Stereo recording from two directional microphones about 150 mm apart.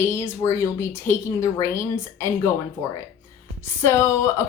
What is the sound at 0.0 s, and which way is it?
Speech, 15° left (ahead or behind).